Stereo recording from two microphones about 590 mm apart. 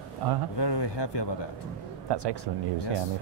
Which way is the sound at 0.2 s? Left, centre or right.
Right.